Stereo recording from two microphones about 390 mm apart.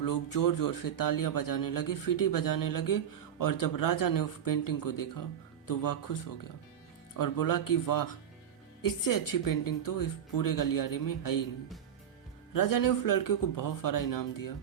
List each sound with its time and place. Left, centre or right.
0.0 s speech: left
7.2 s speech: left
12.5 s speech: left